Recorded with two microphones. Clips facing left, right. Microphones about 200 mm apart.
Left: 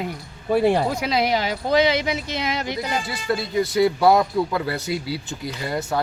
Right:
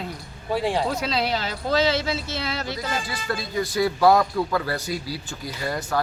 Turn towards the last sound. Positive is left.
turn(degrees=25)  # may be behind; listen again after turning